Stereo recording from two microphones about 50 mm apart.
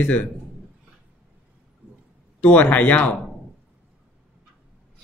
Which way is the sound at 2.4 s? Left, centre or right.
Left.